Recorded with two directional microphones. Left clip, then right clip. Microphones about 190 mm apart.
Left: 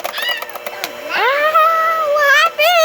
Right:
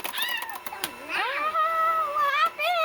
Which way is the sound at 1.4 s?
55° left (ahead or behind).